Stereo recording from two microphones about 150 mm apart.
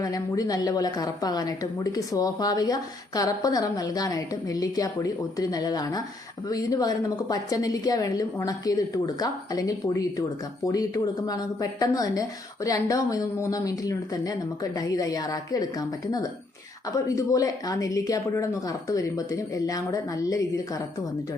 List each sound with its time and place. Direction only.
0.0 s a woman's voice: 25° left (ahead or behind)